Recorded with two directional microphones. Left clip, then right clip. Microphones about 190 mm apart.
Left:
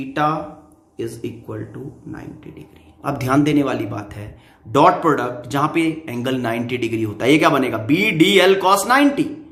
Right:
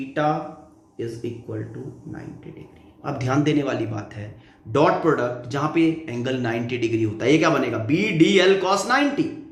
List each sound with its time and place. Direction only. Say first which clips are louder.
0.1 s speech: left 3 dB; 55° left (ahead or behind)
3.0 s speech: left 5 dB; 50° left (ahead or behind)